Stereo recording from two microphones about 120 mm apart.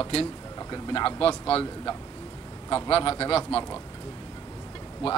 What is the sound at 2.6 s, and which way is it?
Speech, 45° left (ahead or behind).